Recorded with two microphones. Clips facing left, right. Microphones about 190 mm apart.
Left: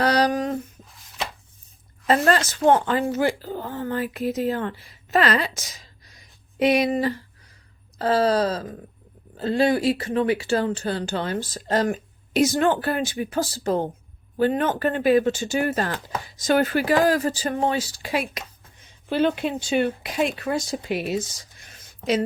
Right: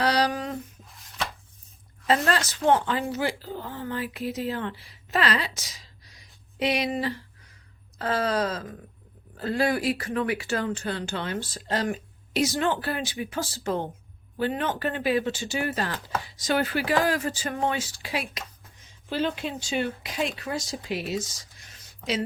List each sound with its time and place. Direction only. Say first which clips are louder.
0.0 s a sound: left 4 dB; 45° left (ahead or behind)
2.0 s speech: left 4 dB; 40° left (ahead or behind)
7.9 s speech: left 6 dB; 35° left (ahead or behind); by 22.2 s 50° left (ahead or behind)